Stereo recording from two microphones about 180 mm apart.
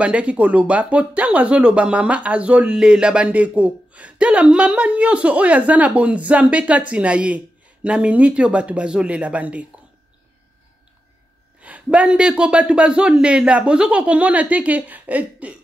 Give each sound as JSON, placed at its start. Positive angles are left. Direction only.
{"t": 0.0, "sound": "speech", "side_deg": -5}
{"t": 11.6, "sound": "speech", "side_deg": -5}